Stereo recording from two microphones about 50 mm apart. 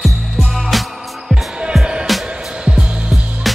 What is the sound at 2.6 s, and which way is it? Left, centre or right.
Music, centre.